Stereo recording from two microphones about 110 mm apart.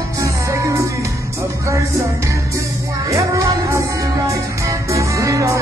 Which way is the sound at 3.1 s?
30° right (ahead or behind).